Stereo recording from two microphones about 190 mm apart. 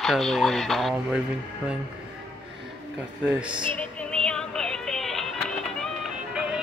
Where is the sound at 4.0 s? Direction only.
5° left (ahead or behind).